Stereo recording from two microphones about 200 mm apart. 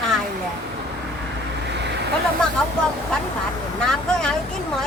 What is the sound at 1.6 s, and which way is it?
Vehicle, 60° right (ahead or behind).